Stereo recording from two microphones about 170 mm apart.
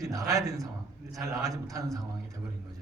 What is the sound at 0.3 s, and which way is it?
A man's voice, 20° right (ahead or behind).